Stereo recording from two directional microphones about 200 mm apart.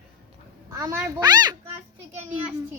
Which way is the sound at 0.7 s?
15° right (ahead or behind).